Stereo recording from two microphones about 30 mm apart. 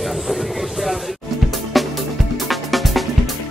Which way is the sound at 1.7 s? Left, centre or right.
Centre.